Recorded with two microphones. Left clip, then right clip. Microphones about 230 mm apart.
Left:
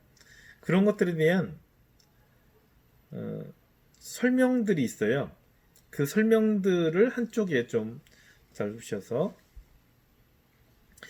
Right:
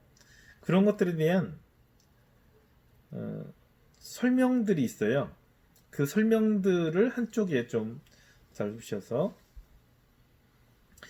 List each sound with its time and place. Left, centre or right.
0.6 s speech: centre
4.1 s speech: centre